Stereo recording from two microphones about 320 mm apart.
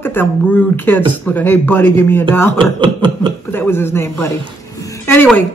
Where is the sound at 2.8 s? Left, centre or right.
Centre.